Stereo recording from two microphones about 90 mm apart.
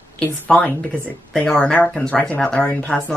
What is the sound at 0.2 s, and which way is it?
Speech, 15° left (ahead or behind).